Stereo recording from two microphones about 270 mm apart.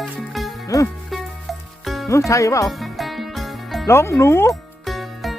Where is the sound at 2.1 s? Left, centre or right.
Centre.